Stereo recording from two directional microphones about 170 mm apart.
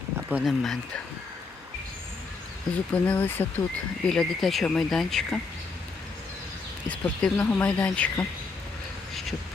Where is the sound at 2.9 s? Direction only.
10° left (ahead or behind).